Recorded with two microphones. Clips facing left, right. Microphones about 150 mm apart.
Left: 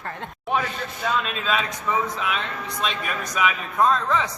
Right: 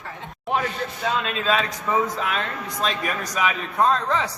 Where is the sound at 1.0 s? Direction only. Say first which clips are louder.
Right 1 dB; 35° right (ahead or behind).